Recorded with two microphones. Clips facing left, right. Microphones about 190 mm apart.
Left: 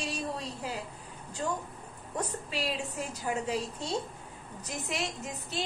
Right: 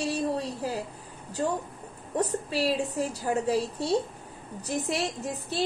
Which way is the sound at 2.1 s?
35° right (ahead or behind).